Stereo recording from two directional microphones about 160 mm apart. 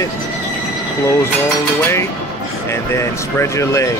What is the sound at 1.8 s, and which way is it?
Speech, 15° left (ahead or behind).